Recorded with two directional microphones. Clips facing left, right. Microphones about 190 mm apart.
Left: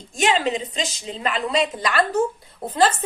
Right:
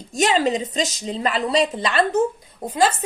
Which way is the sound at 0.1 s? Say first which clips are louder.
Right 2 dB; 40° right (ahead or behind).